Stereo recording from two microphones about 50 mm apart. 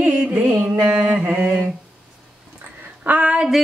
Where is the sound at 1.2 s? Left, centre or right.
Right.